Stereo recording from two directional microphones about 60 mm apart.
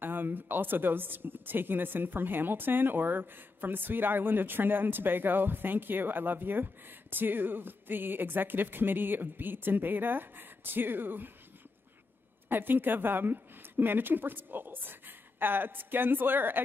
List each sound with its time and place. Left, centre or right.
0.0 s speech: right
12.4 s a woman's voice: right